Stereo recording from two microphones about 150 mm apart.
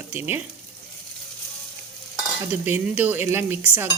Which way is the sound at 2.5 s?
10° right (ahead or behind).